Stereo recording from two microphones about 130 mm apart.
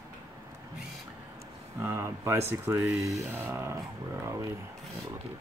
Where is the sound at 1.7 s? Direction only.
20° right (ahead or behind).